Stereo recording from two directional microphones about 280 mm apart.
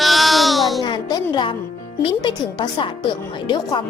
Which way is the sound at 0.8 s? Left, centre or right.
Centre.